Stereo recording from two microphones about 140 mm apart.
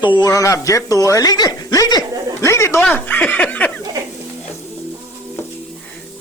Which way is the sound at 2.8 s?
10° left (ahead or behind).